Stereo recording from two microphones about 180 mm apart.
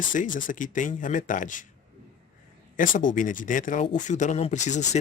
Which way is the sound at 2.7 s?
50° left (ahead or behind).